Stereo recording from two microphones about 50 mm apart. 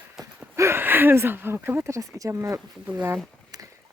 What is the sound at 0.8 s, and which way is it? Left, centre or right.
Speech, right.